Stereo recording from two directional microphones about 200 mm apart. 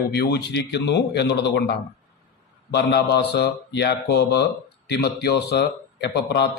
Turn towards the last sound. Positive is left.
turn(degrees=55)  # may be behind; listen again after turning